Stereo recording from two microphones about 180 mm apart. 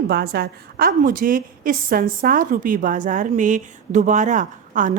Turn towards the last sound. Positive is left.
turn(degrees=-45)  # may be behind; listen again after turning